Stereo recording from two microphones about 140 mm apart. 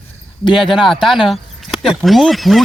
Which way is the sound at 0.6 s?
Centre (ahead or behind).